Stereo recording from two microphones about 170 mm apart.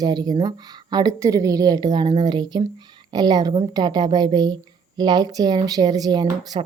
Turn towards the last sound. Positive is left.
turn(degrees=-25)  # may be behind; listen again after turning